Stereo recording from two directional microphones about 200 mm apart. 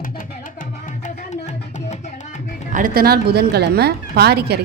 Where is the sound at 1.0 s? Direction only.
35° left (ahead or behind).